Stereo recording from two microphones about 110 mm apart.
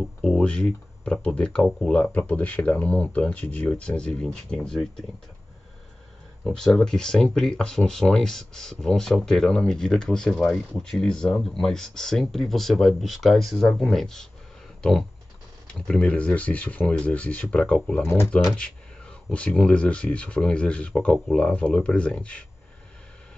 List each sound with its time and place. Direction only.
0.2 s speech: 10° left (ahead or behind)
6.5 s speech: 5° left (ahead or behind)
14.8 s a sound: 5° left (ahead or behind)
15.9 s speech: 10° left (ahead or behind)
18.0 s speech: 20° left (ahead or behind)
18.6 s speech: 10° left (ahead or behind)